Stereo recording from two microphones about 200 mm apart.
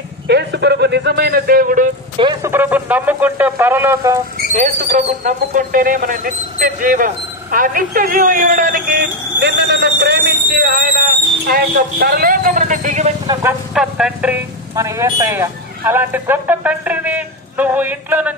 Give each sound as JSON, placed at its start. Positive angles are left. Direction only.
{"t": 0.3, "sound": "a man's voice", "side_deg": -60}
{"t": 2.4, "sound": "speech", "side_deg": -10}
{"t": 4.4, "sound": "speech", "side_deg": -40}
{"t": 13.3, "sound": "speech", "side_deg": -15}
{"t": 13.7, "sound": "speech", "side_deg": -5}